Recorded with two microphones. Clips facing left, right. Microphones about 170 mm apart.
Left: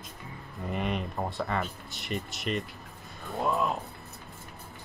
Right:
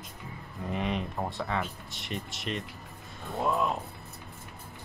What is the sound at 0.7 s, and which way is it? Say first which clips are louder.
Speech: even; centre (ahead or behind).